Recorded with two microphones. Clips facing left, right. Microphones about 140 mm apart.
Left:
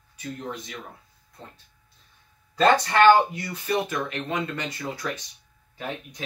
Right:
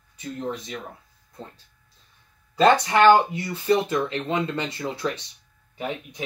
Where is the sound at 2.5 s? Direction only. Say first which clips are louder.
Right 1 dB; 20° right (ahead or behind).